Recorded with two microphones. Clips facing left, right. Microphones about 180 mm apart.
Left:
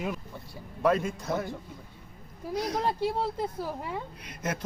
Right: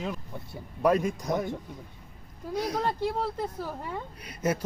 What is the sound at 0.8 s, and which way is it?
Speech, 15° right (ahead or behind).